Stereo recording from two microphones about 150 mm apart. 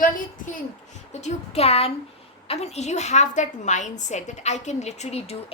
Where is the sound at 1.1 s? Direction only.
50° left (ahead or behind).